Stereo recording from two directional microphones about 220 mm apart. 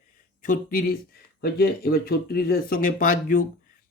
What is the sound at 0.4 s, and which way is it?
Speech, 40° left (ahead or behind).